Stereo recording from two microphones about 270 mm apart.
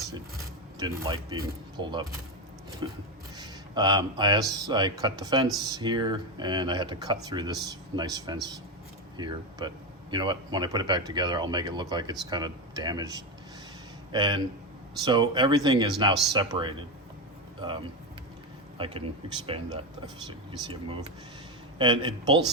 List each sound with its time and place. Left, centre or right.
0.8 s speech: centre
19.5 s speech: centre